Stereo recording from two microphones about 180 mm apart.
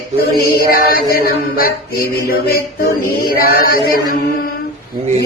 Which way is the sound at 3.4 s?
55° left (ahead or behind).